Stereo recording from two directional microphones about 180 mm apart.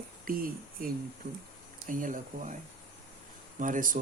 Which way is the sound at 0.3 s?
55° right (ahead or behind).